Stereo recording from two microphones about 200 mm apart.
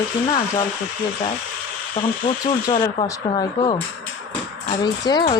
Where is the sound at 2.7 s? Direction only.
25° left (ahead or behind).